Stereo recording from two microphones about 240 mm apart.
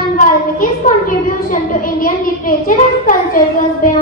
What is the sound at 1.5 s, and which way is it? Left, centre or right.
A child's voice, left.